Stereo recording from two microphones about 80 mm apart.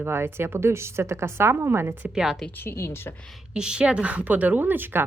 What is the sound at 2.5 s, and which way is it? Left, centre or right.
Speech, left.